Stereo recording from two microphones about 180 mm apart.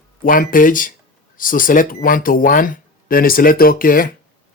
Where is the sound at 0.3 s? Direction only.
50° left (ahead or behind).